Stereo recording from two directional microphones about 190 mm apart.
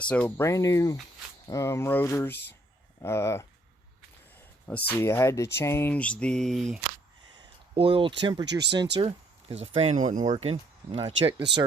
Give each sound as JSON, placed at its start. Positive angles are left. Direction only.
{"t": 0.0, "sound": "speech", "side_deg": 5}
{"t": 4.9, "sound": "speech", "side_deg": 10}
{"t": 7.3, "sound": "a sound", "side_deg": -30}
{"t": 8.4, "sound": "speech", "side_deg": -65}
{"t": 9.0, "sound": "a sound", "side_deg": -30}
{"t": 9.7, "sound": "speech", "side_deg": -35}